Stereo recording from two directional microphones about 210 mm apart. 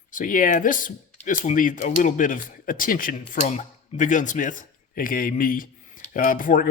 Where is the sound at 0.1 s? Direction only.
40° left (ahead or behind).